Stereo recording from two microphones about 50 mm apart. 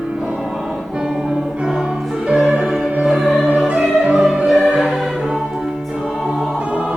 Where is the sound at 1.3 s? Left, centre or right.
Centre.